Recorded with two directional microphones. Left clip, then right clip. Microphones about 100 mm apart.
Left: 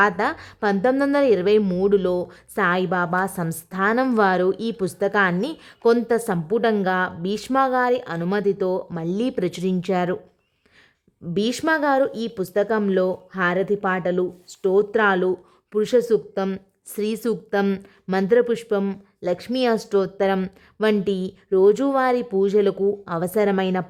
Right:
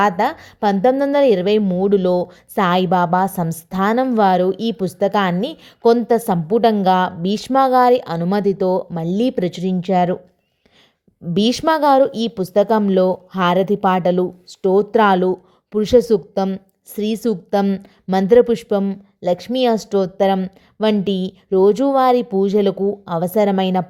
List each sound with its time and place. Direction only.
0.0 s speech: 20° right (ahead or behind)
4.1 s speech: 15° right (ahead or behind)
11.3 s speech: 30° right (ahead or behind)
16.9 s a woman's voice: 15° right (ahead or behind)